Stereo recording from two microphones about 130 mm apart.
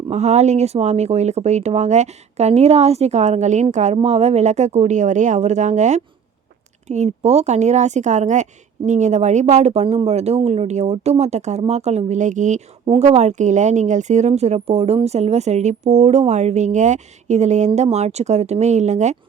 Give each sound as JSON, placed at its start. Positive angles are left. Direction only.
{"t": 0.1, "sound": "a woman's voice", "side_deg": -60}
{"t": 13.0, "sound": "a woman's voice", "side_deg": -55}